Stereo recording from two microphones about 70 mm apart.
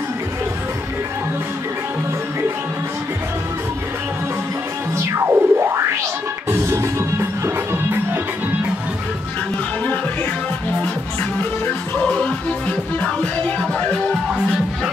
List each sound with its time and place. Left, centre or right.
4.9 s music: right
12.0 s music: centre